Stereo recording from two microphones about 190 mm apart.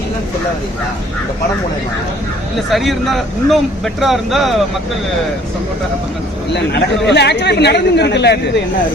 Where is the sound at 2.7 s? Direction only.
Centre (ahead or behind).